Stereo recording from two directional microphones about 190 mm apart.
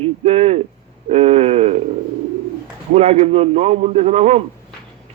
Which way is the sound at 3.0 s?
35° right (ahead or behind).